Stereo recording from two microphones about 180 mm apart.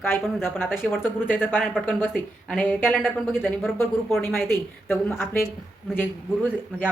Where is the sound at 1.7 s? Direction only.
5° right (ahead or behind).